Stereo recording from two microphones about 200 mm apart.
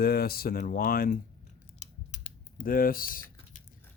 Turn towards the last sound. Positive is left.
turn(degrees=45)  # may be behind; listen again after turning